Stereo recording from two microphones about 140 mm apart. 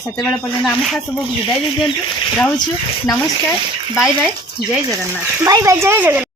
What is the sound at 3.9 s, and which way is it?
Speech, 5° right (ahead or behind).